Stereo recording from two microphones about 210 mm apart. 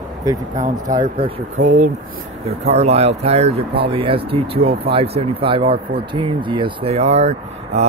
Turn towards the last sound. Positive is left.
turn(degrees=-30)  # may be behind; listen again after turning